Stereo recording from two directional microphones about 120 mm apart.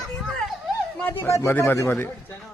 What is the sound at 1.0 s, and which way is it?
A man's voice, 20° left (ahead or behind).